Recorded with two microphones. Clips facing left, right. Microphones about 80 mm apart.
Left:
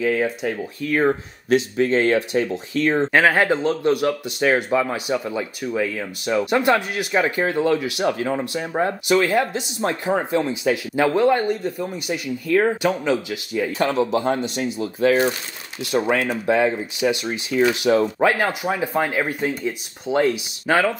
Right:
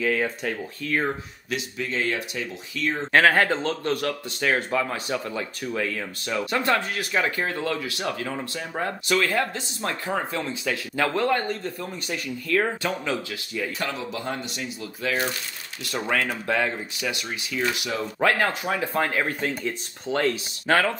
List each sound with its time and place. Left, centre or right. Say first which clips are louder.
0.0 s speech: left 4 dB; centre
0.9 s speech: left 7 dB; left
1.8 s speech: left 6 dB; left
3.1 s speech: right 2 dB; centre
14.1 s speech: left 10 dB; left
15.8 s speech: left 6 dB; centre
17.9 s speech: left 12 dB; left
18.2 s speech: left 3 dB; centre